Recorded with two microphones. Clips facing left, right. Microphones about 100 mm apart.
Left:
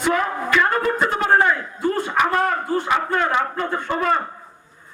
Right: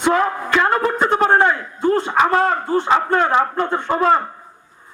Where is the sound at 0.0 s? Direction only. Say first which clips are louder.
Right 3 dB; 30° right (ahead or behind).